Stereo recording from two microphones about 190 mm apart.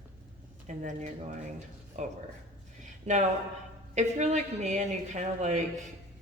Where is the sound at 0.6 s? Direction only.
40° right (ahead or behind).